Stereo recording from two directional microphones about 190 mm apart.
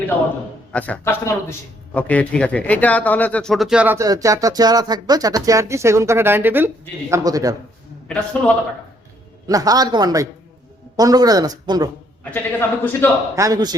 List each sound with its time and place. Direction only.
0.7 s a man's voice: 10° left (ahead or behind); by 7.5 s 20° right (ahead or behind)
8.0 s a man's voice: 5° left (ahead or behind)
9.5 s speech: 20° right (ahead or behind)
12.2 s a man's voice: 10° left (ahead or behind)
13.3 s speech: 20° right (ahead or behind)